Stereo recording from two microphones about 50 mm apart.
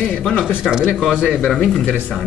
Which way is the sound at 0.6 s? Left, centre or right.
Centre.